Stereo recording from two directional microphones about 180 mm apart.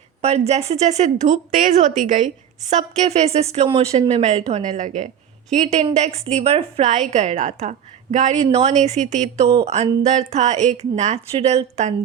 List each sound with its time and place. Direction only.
0.2 s a woman's voice: 35° right (ahead or behind)